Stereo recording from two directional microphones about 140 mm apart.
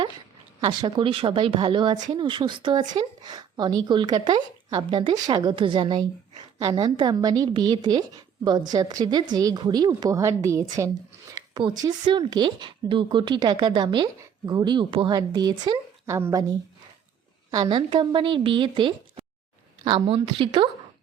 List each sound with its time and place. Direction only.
0.6 s a woman's voice: 30° right (ahead or behind)